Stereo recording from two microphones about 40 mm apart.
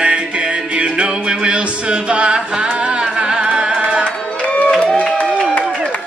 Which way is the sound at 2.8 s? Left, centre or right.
Right.